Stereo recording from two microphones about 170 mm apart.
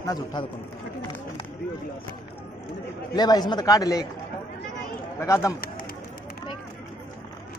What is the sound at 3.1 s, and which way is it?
Speech, 25° left (ahead or behind).